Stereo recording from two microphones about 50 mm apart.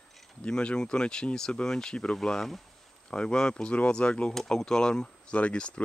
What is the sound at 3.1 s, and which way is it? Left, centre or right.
Speech, centre.